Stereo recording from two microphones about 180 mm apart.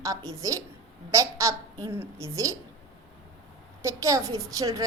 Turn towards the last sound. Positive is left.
turn(degrees=-20)  # may be behind; listen again after turning